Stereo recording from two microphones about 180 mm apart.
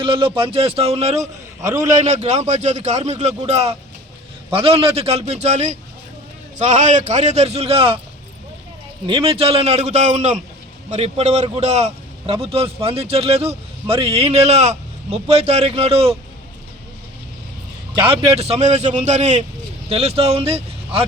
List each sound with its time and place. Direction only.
0.0 s a man's voice: 30° right (ahead or behind)
1.6 s a man's voice: 20° right (ahead or behind)
1.9 s a man's voice: 40° right (ahead or behind)
9.0 s a man's voice: 30° right (ahead or behind)
17.9 s a man's voice: 30° right (ahead or behind)